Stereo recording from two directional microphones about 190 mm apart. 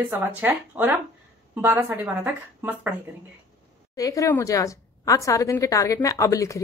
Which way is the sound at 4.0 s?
15° left (ahead or behind).